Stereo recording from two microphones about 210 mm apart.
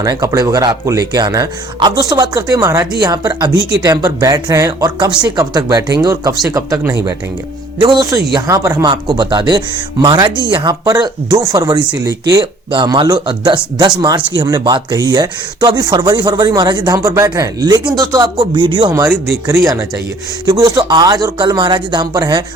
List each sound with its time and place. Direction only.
0.0 s speech: 15° right (ahead or behind)